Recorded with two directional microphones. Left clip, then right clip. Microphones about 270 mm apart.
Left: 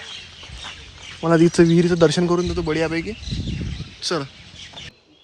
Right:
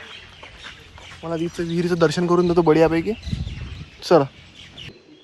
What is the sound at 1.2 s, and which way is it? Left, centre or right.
Speech, left.